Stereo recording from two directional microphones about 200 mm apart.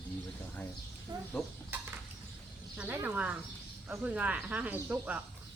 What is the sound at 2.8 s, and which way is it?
Speech, 10° right (ahead or behind).